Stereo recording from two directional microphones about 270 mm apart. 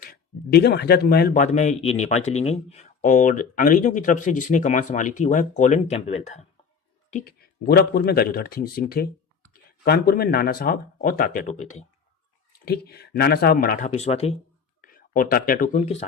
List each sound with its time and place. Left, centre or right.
0.0 s speech: left